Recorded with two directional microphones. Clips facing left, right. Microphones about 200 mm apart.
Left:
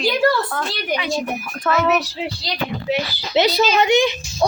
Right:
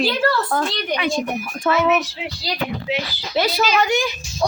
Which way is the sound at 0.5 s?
30° right (ahead or behind).